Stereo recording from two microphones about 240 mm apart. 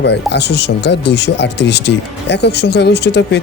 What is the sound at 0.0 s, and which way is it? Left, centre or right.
Speech, left.